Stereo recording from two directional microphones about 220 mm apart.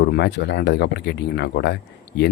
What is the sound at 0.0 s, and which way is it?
Speech, 50° left (ahead or behind).